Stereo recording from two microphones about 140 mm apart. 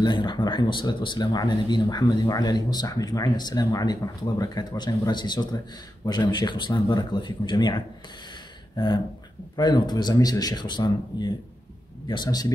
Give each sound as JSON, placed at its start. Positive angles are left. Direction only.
{"t": 0.0, "sound": "speech", "side_deg": 35}
{"t": 8.7, "sound": "a sound", "side_deg": 30}
{"t": 9.6, "sound": "speech", "side_deg": 30}